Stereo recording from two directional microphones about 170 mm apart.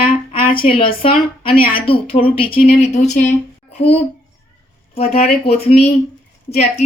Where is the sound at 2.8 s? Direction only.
45° left (ahead or behind).